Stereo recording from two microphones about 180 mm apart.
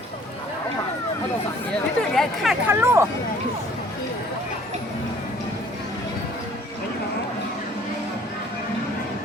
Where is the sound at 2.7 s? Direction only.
15° right (ahead or behind).